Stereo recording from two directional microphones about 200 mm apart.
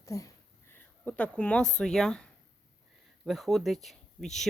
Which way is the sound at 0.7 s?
10° left (ahead or behind).